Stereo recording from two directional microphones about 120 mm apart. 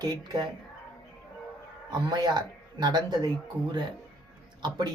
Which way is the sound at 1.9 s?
35° right (ahead or behind).